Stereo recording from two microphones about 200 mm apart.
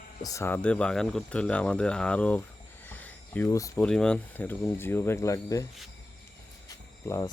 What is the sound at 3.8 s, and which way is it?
Speech, 5° left (ahead or behind).